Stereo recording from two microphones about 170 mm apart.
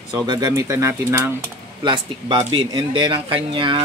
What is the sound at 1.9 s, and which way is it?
Speech, 25° right (ahead or behind).